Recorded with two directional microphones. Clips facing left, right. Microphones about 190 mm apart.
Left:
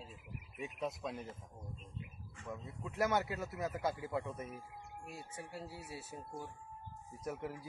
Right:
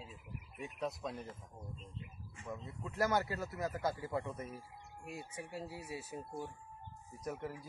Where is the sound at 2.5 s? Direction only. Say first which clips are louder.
Even; 5° left (ahead or behind).